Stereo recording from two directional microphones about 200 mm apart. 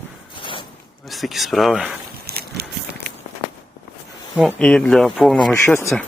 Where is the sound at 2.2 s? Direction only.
50° right (ahead or behind).